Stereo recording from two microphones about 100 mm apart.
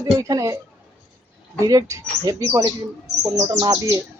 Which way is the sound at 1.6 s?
35° right (ahead or behind).